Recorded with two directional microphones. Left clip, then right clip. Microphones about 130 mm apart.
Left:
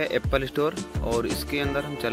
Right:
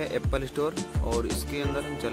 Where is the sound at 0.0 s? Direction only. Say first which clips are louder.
Left 5 dB; 30° left (ahead or behind).